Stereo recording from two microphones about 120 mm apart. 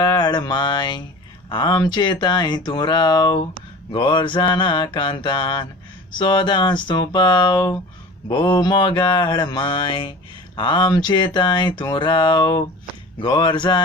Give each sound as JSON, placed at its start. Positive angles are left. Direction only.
{"t": 0.0, "sound": "mantra", "side_deg": 35}
{"t": 1.5, "sound": "speech", "side_deg": 40}